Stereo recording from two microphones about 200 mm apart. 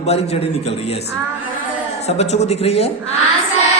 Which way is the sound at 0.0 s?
30° left (ahead or behind).